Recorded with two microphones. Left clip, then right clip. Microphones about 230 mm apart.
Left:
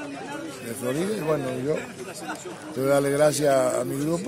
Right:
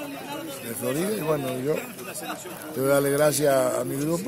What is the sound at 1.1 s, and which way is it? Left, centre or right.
Speech, centre.